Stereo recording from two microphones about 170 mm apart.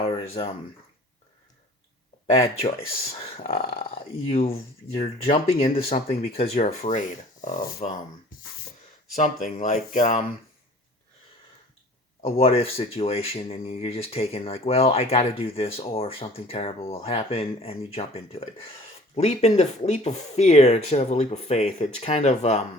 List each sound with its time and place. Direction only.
0.0 s a sound: 35° left (ahead or behind)
3.0 s speech: 35° left (ahead or behind)
9.1 s speech: 45° left (ahead or behind)
12.2 s speech: 35° left (ahead or behind)